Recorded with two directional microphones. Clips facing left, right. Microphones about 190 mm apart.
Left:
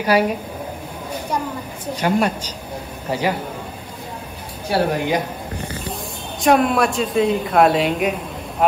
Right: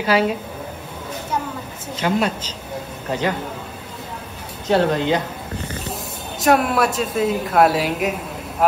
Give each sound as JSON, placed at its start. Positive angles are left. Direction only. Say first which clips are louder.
{"t": 0.0, "sound": "a woman's voice", "louder": "left 1 dB", "side_deg": 15}
{"t": 2.0, "sound": "a woman's voice", "louder": "left 1 dB", "side_deg": 10}
{"t": 4.6, "sound": "a woman's voice", "louder": "right 2 dB", "side_deg": 10}
{"t": 6.4, "sound": "speech", "louder": "left 1 dB", "side_deg": -5}